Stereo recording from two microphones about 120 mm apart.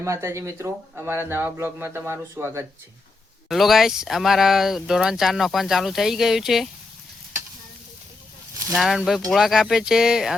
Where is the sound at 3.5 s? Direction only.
Centre (ahead or behind).